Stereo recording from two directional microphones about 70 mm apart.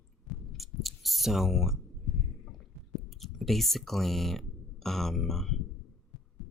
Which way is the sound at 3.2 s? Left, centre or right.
Centre.